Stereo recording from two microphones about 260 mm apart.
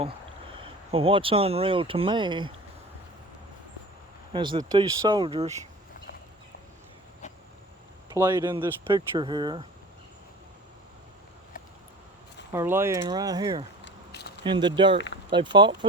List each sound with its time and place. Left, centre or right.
0.6 s speech: right
4.3 s speech: centre
8.1 s speech: centre
12.5 s speech: centre
13.8 s a sound: left
14.4 s speech: centre